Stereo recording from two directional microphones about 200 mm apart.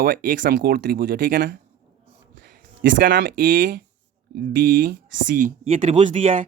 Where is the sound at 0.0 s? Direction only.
45° right (ahead or behind).